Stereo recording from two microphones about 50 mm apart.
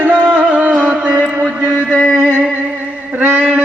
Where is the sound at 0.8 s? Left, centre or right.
Right.